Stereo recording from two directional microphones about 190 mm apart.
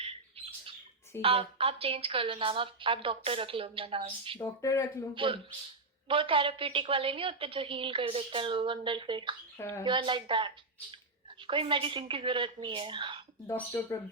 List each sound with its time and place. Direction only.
1.2 s a woman's voice: 30° right (ahead or behind)
4.4 s speech: 15° left (ahead or behind)
5.1 s a woman's voice: 25° right (ahead or behind)
9.6 s speech: 15° left (ahead or behind)
9.8 s a woman's voice: 25° right (ahead or behind)